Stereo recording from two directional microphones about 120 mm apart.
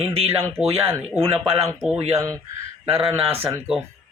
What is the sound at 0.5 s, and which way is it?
Speech, 20° right (ahead or behind).